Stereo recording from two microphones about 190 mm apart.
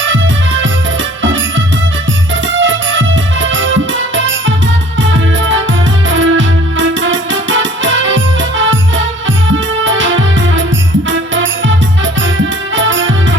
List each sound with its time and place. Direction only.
1.2 s music: 80° right
9.8 s music: 80° right
12.7 s music: 80° right